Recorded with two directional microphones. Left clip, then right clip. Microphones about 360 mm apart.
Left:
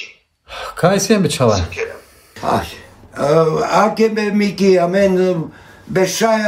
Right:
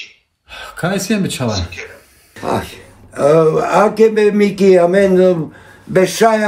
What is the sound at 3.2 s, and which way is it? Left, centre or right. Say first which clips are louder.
Speech: right 3 dB; centre.